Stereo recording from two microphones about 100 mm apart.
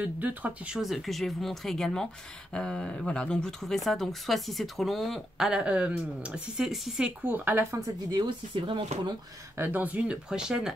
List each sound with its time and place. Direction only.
0.0 s speech: 15° right (ahead or behind)
0.7 s speech: centre (ahead or behind)
7.2 s speech: 15° right (ahead or behind)
8.1 s speech: 55° right (ahead or behind)
9.6 s speech: 15° right (ahead or behind)